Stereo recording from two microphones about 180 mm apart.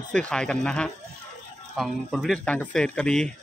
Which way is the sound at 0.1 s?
5° left (ahead or behind).